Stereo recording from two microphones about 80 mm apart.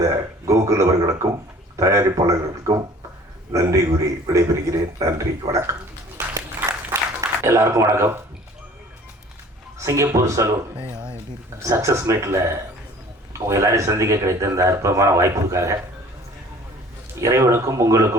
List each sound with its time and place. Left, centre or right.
0.0 s a man's voice: right
6.6 s a sound: right
9.7 s a man's voice: right
10.9 s speech: centre
11.6 s a man's voice: right
17.2 s a man's voice: right